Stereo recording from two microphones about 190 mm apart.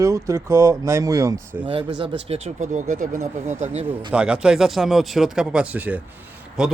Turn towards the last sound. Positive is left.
turn(degrees=-5)  # may be behind; listen again after turning